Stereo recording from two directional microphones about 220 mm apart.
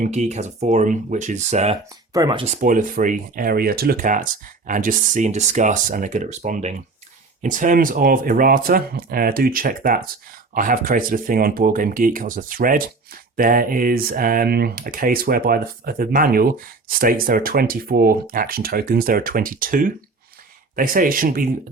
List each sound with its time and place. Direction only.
0.0 s speech: 30° right (ahead or behind)
2.1 s speech: 20° right (ahead or behind); by 21.5 s 40° right (ahead or behind)